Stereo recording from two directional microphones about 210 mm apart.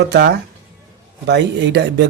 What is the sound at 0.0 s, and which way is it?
Speech, 55° right (ahead or behind).